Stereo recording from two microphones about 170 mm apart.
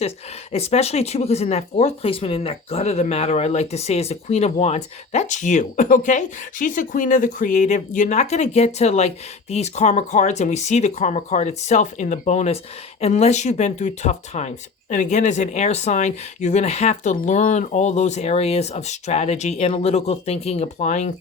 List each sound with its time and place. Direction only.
0.5 s speech: 40° left (ahead or behind)